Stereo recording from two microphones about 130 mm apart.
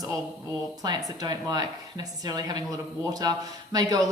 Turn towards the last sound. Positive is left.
turn(degrees=-30)  # may be behind; listen again after turning